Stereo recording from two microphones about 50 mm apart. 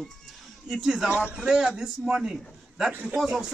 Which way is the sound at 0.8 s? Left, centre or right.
Centre.